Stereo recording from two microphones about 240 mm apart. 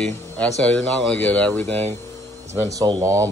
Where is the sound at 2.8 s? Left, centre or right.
Centre.